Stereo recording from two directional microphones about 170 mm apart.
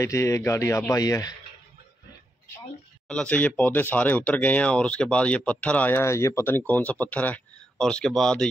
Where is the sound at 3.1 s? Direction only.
5° left (ahead or behind).